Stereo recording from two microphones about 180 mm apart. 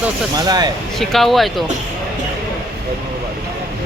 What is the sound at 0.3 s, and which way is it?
Speech, 20° right (ahead or behind).